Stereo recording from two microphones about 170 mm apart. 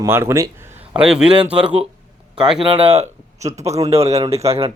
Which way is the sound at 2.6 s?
35° right (ahead or behind).